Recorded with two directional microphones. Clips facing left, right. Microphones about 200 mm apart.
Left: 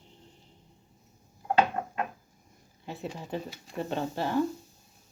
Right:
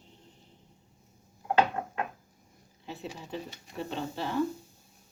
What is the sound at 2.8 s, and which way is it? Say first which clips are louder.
Speech: left 3 dB; 50° left (ahead or behind).